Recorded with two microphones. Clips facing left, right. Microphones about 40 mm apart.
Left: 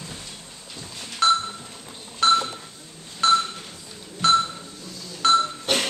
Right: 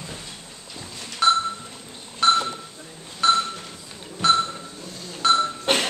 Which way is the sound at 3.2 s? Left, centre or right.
Centre.